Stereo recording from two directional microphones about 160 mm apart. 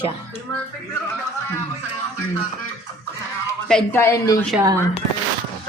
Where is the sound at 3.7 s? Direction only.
15° left (ahead or behind).